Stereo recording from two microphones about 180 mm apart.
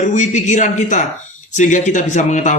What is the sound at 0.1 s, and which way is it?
A man's voice, 40° left (ahead or behind).